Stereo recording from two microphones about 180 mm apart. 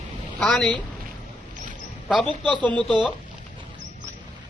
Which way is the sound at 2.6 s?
5° left (ahead or behind).